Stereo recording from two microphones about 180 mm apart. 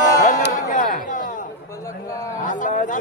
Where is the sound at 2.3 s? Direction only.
45° left (ahead or behind).